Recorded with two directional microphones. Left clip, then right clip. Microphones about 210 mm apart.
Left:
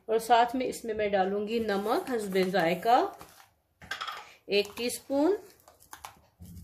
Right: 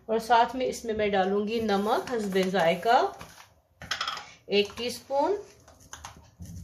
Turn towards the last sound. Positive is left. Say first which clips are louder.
# right 1 dB
turn(degrees=45)  # may be behind; listen again after turning